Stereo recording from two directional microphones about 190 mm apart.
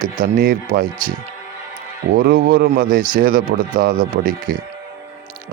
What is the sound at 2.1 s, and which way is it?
A man's voice, 50° right (ahead or behind).